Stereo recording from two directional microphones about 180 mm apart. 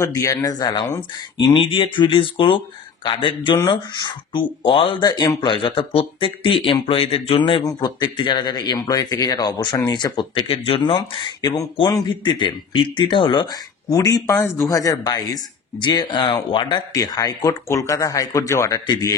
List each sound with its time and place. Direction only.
0.0 s speech: 20° left (ahead or behind)